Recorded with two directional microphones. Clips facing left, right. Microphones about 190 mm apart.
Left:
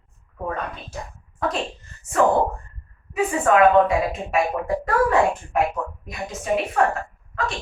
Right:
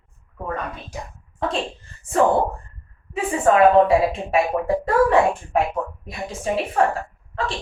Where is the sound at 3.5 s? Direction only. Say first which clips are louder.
Right 2 dB; 30° right (ahead or behind).